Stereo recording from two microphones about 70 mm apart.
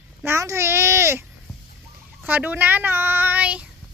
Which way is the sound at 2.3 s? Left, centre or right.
Right.